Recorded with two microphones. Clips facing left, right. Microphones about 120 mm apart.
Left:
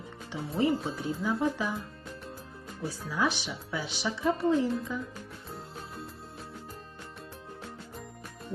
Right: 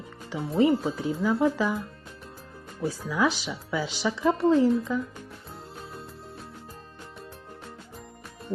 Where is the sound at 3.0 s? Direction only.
90° right.